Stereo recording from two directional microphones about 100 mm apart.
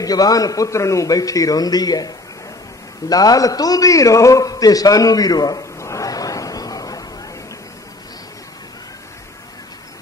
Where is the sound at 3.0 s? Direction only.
40° left (ahead or behind).